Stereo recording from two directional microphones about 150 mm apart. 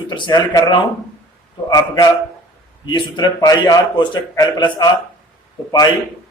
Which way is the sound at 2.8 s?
30° left (ahead or behind).